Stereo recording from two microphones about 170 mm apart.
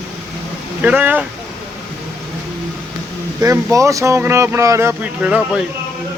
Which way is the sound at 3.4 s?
25° right (ahead or behind).